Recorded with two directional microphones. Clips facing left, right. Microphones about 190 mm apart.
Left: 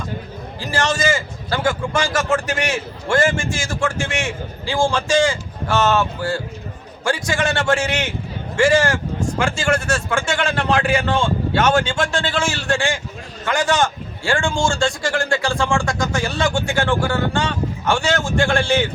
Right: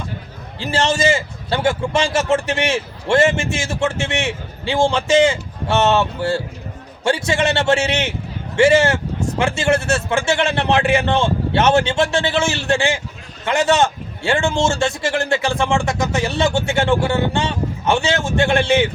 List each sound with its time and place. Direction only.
0.6 s a man's voice: 25° right (ahead or behind)